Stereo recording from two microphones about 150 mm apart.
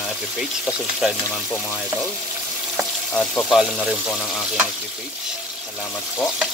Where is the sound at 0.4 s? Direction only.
5° right (ahead or behind).